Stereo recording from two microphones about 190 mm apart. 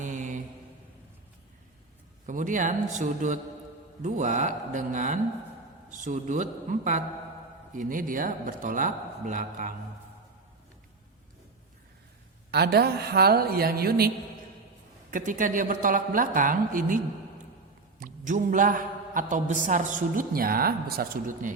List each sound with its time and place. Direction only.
0.0 s mantra: 40° right (ahead or behind)
2.2 s mantra: 45° right (ahead or behind)
7.7 s a man's voice: 45° right (ahead or behind)
12.5 s a woman's voice: 55° right (ahead or behind)
15.1 s a man's voice: 45° right (ahead or behind)
18.0 s a man's voice: 45° right (ahead or behind)